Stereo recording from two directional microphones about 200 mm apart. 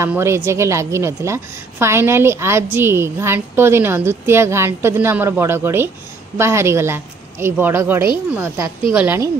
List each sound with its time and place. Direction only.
0.0 s a woman's voice: 15° right (ahead or behind)